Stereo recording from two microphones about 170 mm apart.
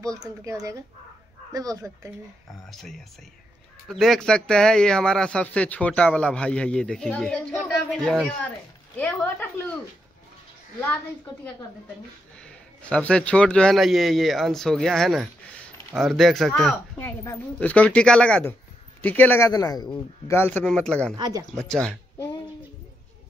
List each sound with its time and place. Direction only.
0.0 s speech: 20° right (ahead or behind)
2.7 s a man's voice: centre (ahead or behind)
12.4 s a man's voice: 5° left (ahead or behind)